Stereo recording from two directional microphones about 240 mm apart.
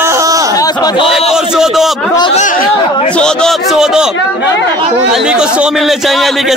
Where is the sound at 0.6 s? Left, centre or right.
Centre.